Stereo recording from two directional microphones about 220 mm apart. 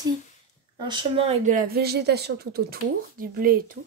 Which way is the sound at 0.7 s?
20° right (ahead or behind).